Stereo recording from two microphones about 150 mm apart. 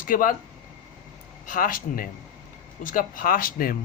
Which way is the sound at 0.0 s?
65° left (ahead or behind).